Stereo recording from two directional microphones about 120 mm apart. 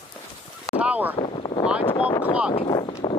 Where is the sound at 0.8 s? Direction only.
15° right (ahead or behind).